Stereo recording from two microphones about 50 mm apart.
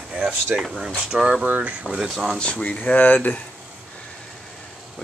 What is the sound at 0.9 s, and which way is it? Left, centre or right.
Speech, centre.